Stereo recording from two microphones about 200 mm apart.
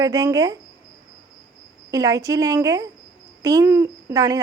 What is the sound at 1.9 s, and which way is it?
Speech, 20° right (ahead or behind).